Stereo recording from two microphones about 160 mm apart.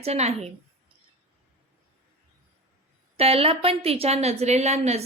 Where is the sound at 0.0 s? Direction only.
40° right (ahead or behind).